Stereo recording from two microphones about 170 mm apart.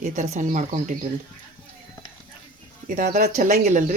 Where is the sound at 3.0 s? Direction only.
50° right (ahead or behind).